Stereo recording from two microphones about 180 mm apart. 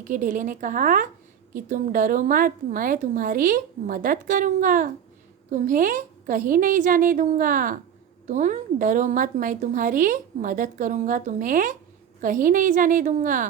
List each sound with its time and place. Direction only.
0.1 s a woman's voice: 50° right (ahead or behind)